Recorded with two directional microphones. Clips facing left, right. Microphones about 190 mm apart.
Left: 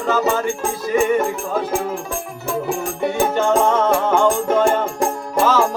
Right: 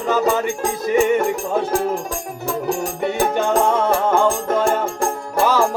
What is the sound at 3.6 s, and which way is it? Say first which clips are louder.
Music: left 1 dB; 10° right (ahead or behind).